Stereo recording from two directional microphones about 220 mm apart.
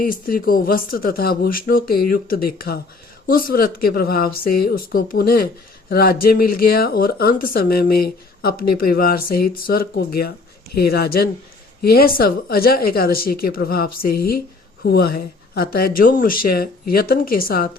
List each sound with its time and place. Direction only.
0.0 s speech: 40° left (ahead or behind)